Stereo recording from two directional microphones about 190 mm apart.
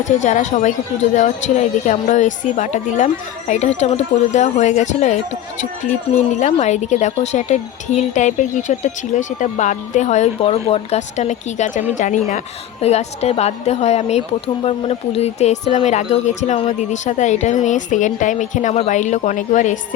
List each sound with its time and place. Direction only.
0.0 s a woman's voice: 40° left (ahead or behind)